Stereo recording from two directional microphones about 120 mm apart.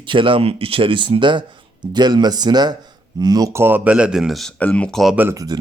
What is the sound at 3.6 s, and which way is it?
Speech, 15° right (ahead or behind).